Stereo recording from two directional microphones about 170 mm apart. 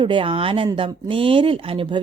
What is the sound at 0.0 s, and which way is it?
A woman's voice, 30° right (ahead or behind).